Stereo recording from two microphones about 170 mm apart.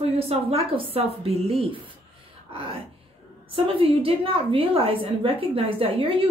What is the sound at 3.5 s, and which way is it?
A woman's voice, 35° right (ahead or behind).